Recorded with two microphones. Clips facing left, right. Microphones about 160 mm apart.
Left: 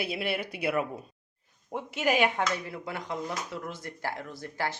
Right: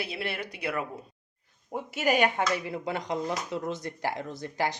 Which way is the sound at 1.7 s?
Centre (ahead or behind).